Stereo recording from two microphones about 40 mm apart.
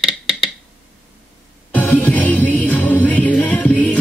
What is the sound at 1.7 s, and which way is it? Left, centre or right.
Music, left.